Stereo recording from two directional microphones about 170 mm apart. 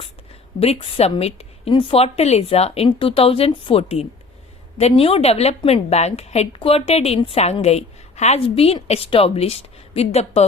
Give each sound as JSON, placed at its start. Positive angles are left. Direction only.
{"t": 0.6, "sound": "a woman's voice", "side_deg": 35}